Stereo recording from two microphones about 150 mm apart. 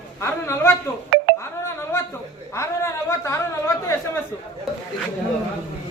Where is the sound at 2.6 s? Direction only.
20° left (ahead or behind).